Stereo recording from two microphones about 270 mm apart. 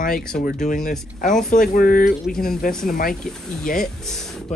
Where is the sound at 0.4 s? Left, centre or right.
Left.